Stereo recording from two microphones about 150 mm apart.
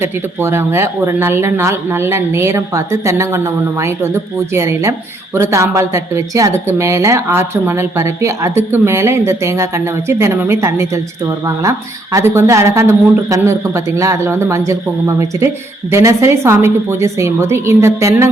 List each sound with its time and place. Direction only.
0.0 s a man's voice: 15° right (ahead or behind)